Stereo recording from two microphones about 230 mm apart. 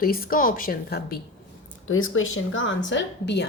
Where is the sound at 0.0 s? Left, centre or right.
Left.